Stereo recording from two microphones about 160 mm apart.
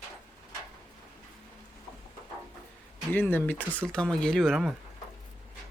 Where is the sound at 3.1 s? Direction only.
10° left (ahead or behind).